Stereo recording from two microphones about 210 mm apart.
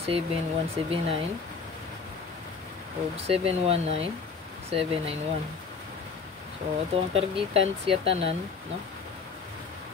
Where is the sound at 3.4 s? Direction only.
30° right (ahead or behind).